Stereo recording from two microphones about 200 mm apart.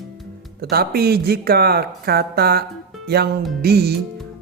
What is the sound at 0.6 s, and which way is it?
Speech, 50° right (ahead or behind).